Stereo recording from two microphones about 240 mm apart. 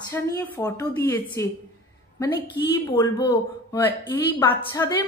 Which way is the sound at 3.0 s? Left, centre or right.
Centre.